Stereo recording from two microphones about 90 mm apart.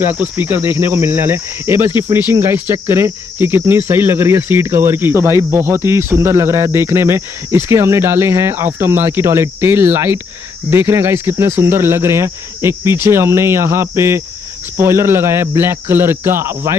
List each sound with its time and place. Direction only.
0.0 s cricket: 20° right (ahead or behind)